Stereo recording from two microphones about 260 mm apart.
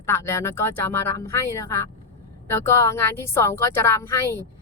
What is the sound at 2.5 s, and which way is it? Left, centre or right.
Speech, centre.